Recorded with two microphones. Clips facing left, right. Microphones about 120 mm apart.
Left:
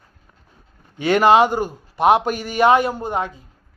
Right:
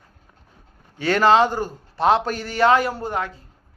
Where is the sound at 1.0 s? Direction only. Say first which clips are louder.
Left 2 dB; 15° left (ahead or behind).